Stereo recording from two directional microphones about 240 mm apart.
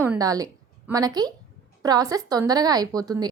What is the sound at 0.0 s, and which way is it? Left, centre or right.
A woman's voice, centre.